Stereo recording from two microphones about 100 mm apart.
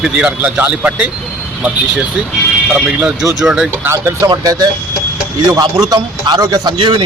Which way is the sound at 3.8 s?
25° right (ahead or behind).